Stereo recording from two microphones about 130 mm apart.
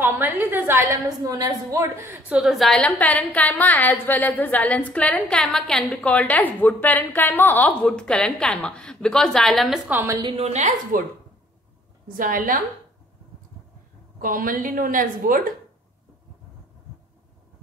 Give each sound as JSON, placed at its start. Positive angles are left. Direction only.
{"t": 0.0, "sound": "a woman's voice", "side_deg": -15}
{"t": 9.8, "sound": "a woman's voice", "side_deg": -15}
{"t": 10.3, "sound": "a woman's voice", "side_deg": -60}
{"t": 12.2, "sound": "a woman's voice", "side_deg": -90}
{"t": 14.2, "sound": "a woman's voice", "side_deg": -90}